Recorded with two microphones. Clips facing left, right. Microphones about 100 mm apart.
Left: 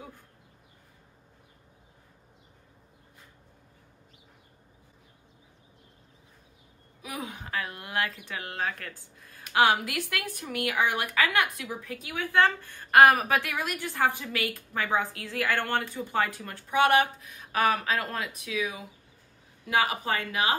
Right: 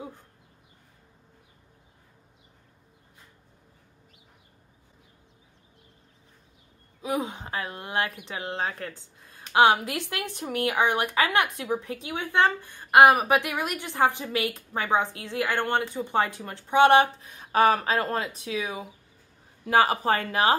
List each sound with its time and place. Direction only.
7.0 s speech: 25° right (ahead or behind)